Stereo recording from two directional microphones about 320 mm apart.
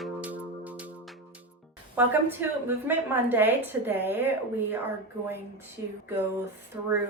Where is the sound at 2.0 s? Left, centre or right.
Centre.